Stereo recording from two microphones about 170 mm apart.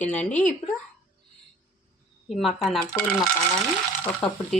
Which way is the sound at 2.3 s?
Centre (ahead or behind).